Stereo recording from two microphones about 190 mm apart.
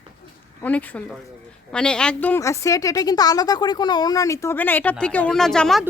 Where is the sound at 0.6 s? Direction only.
10° left (ahead or behind).